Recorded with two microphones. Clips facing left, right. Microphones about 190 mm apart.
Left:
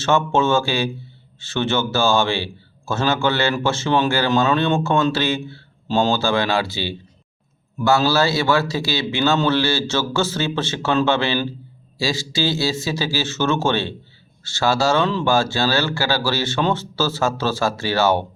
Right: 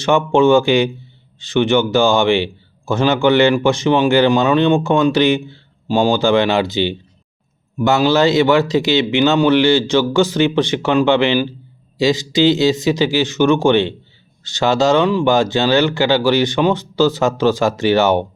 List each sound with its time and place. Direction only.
0.0 s a man's voice: 15° right (ahead or behind)